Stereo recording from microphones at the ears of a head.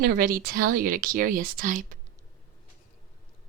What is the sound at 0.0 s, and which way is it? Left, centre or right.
Speech, right.